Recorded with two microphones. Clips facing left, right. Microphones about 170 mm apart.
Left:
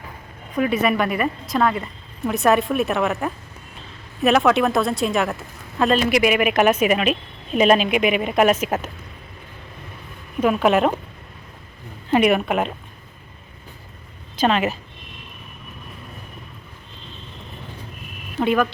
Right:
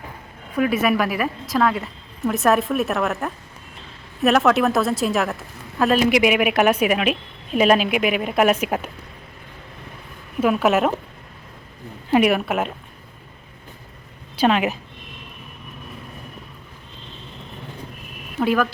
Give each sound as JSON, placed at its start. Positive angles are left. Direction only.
{"t": 0.5, "sound": "a woman's voice", "side_deg": -5}
{"t": 6.1, "sound": "a woman's voice", "side_deg": -15}
{"t": 10.4, "sound": "a woman's voice", "side_deg": -5}
{"t": 12.1, "sound": "a woman's voice", "side_deg": -5}
{"t": 14.3, "sound": "a woman's voice", "side_deg": -10}
{"t": 18.3, "sound": "speech", "side_deg": 0}